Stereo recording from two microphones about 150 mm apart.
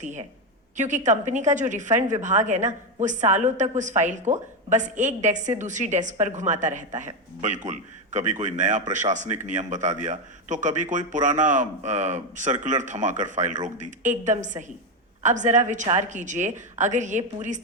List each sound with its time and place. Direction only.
0.0 s a man's voice: 55° right (ahead or behind)